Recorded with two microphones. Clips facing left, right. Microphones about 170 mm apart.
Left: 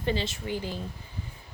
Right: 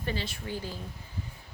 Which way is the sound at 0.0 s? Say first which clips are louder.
Left 5 dB; 25° left (ahead or behind).